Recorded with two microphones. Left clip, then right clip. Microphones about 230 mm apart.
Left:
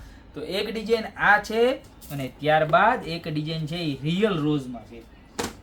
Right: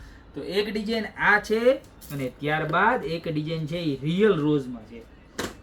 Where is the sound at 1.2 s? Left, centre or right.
Centre.